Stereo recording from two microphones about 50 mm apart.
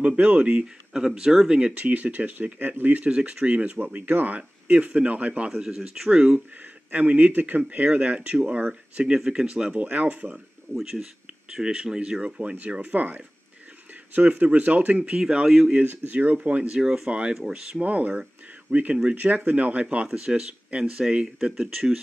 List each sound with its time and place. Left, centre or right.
0.0 s speech: right
0.9 s speech: centre
1.5 s speech: right
3.1 s speech: centre
3.8 s speech: right
5.5 s speech: centre
6.9 s speech: right
10.8 s speech: centre
12.7 s speech: right; by 15.8 s centre
16.1 s speech: right
16.3 s speech: right
16.8 s speech: centre
17.8 s speech: right
20.1 s speech: centre